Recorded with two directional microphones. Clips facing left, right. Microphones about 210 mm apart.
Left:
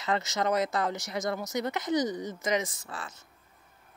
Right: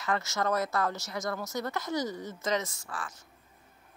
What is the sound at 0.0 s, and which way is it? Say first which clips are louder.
Speech: left 2 dB; 20° left (ahead or behind).